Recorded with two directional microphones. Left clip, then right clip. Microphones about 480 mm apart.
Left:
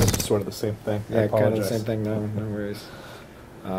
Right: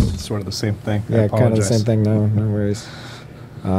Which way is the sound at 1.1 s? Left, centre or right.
Right.